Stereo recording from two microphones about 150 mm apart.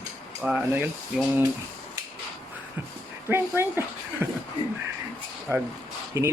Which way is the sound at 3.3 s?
10° right (ahead or behind).